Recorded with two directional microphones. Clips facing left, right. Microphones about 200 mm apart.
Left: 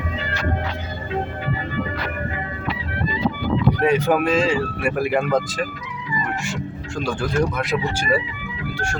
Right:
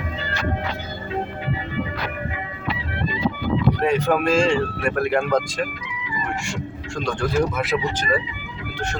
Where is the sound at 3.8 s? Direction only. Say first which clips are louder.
Left 2 dB; 5° left (ahead or behind).